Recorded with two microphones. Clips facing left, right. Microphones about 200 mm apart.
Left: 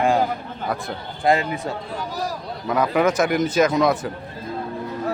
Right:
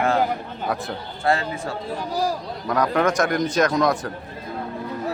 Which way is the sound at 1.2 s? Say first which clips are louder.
Left 3 dB; 15° left (ahead or behind).